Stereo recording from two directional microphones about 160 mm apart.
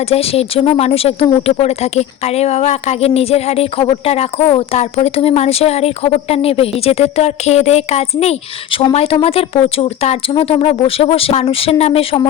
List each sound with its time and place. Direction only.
0.0 s speech: 40° left (ahead or behind)